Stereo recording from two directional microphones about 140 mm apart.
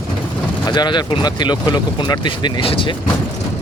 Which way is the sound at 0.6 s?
30° left (ahead or behind).